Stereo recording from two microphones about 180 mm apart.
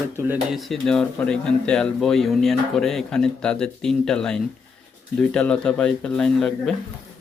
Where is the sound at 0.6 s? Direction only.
Centre (ahead or behind).